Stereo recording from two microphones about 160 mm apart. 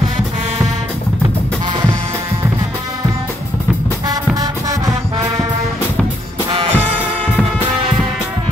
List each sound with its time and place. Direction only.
4.1 s music: 20° right (ahead or behind)
6.5 s music: 35° right (ahead or behind)